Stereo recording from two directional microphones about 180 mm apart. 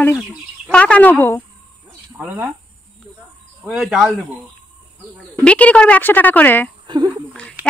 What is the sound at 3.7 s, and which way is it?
Speech, centre (ahead or behind).